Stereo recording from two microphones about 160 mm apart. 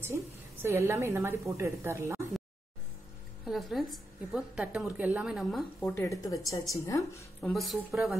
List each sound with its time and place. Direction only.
0.0 s a woman's voice: 15° right (ahead or behind)
3.4 s a woman's voice: centre (ahead or behind)
5.9 s a woman's voice: 20° left (ahead or behind)
7.4 s a woman's voice: centre (ahead or behind)